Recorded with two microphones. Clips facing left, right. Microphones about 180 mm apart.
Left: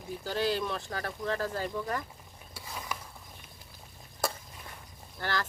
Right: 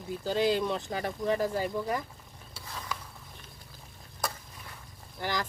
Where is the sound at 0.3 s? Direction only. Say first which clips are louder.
Right 4 dB; 15° right (ahead or behind).